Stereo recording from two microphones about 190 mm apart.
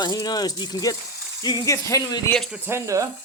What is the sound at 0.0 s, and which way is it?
Speech, 20° left (ahead or behind).